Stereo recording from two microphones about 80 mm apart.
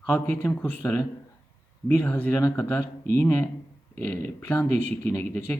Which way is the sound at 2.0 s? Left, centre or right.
Centre.